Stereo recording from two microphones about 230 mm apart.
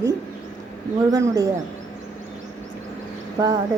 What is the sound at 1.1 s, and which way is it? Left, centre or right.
Speech, centre.